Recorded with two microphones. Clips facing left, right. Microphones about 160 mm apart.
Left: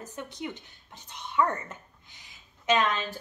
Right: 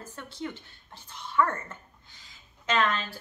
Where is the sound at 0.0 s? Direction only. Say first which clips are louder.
Left 1 dB; 15° left (ahead or behind).